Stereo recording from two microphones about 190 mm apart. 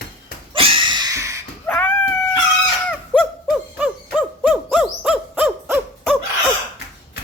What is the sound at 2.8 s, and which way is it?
Owl, 5° left (ahead or behind).